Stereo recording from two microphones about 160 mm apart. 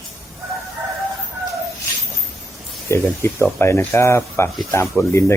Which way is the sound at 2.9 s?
15° left (ahead or behind).